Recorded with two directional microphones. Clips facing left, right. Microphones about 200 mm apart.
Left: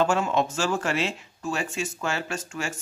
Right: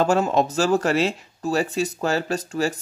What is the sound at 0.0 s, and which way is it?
Speech, 40° right (ahead or behind).